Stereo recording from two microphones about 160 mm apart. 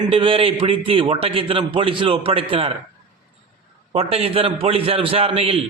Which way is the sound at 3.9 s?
40° right (ahead or behind).